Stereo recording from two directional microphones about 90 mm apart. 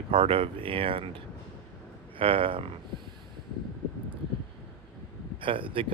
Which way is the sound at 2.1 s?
85° right.